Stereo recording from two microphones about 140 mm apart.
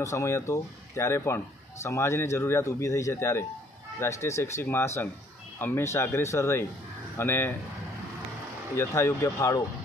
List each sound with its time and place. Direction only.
0.0 s speech: 20° left (ahead or behind)
8.7 s speech: 20° left (ahead or behind)